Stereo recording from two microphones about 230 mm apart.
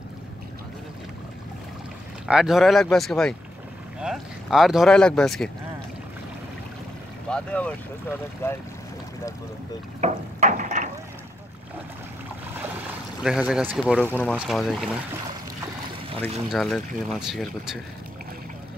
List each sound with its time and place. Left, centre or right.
2.2 s speech: centre
7.2 s speech: centre
9.9 s a sound: right
13.2 s speech: centre
13.9 s speech: centre
16.2 s speech: centre